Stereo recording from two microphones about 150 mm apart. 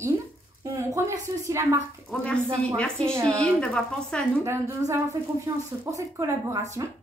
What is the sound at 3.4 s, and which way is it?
Speech, 5° left (ahead or behind).